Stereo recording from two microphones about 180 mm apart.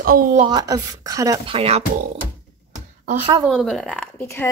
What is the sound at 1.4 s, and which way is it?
Speech, 35° right (ahead or behind).